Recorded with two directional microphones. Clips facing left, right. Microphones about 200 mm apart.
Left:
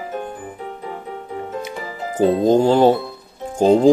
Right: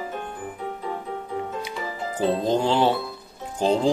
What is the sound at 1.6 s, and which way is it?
Music, 50° left (ahead or behind).